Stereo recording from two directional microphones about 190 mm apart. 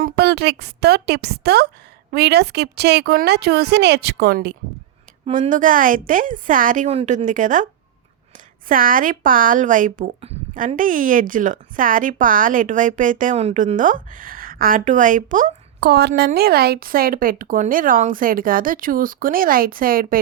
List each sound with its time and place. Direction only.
0.0 s a woman's voice: 60° right (ahead or behind)
5.2 s speech: 40° right (ahead or behind)
15.8 s speech: 60° right (ahead or behind)